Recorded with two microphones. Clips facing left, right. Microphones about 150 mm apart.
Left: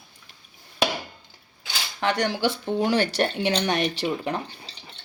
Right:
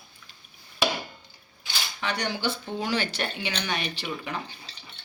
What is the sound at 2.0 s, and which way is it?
Speech, 50° left (ahead or behind).